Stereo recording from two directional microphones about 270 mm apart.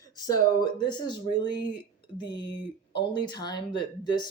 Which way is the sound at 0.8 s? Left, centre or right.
Centre.